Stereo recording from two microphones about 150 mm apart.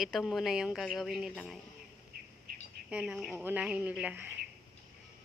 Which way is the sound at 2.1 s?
80° right.